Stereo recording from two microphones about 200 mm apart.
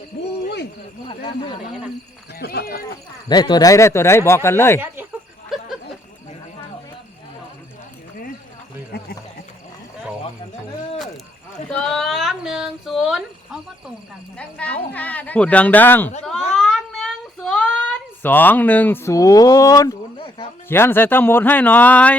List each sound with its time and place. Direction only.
0.4 s snake: 55° left (ahead or behind)
1.0 s speech: 25° left (ahead or behind)
2.4 s speech: 50° left (ahead or behind)
3.2 s a woman's voice: 20° left (ahead or behind)
11.7 s a sound: 5° left (ahead or behind)
14.3 s a woman's voice: 5° left (ahead or behind)
16.6 s child singing: centre (ahead or behind)
20.1 s a sound: 25° left (ahead or behind)
20.7 s a woman's voice: 10° left (ahead or behind)